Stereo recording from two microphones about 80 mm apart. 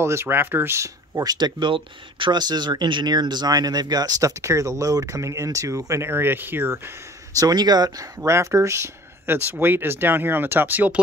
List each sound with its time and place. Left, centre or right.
0.0 s speech: right
1.2 s speech: right
6.0 s speech: right
7.3 s speech: right
8.2 s speech: right